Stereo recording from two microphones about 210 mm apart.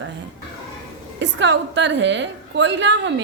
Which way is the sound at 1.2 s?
60° right (ahead or behind).